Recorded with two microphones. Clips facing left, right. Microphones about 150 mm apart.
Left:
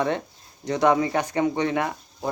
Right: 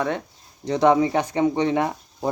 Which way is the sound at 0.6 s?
30° right (ahead or behind).